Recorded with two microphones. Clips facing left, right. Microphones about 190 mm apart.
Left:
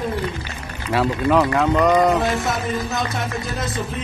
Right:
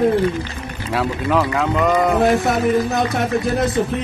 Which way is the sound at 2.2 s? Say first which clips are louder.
Right 6 dB; 55° right (ahead or behind).